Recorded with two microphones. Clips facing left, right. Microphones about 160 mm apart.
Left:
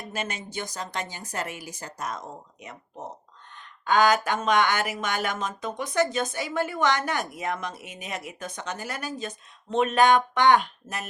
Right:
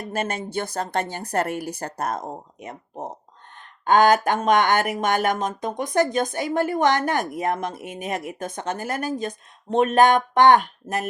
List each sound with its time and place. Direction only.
0.1 s a woman's voice: 55° right (ahead or behind)